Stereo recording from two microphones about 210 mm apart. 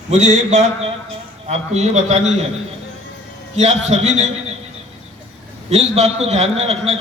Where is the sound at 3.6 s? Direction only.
30° right (ahead or behind).